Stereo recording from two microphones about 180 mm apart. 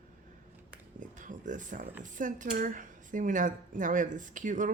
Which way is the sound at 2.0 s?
45° right (ahead or behind).